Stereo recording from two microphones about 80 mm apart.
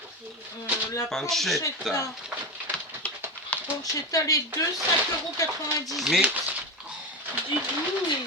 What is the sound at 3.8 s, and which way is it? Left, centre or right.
Speech, left.